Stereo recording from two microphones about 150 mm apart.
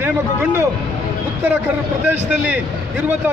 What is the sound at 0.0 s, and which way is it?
Speech, 10° right (ahead or behind).